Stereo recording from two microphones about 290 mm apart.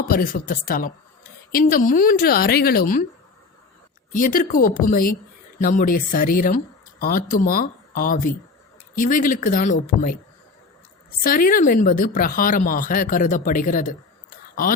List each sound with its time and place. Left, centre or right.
0.1 s a woman's voice: left
4.1 s speech: left
11.2 s speech: left